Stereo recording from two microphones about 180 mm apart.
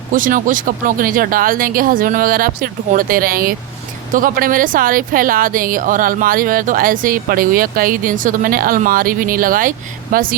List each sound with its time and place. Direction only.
0.1 s speech: 50° right (ahead or behind)